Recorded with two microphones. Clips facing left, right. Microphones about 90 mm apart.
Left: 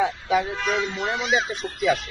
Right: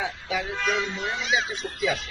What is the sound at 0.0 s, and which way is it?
Speech, 50° left (ahead or behind).